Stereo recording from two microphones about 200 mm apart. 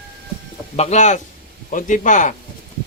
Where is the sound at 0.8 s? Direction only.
35° left (ahead or behind).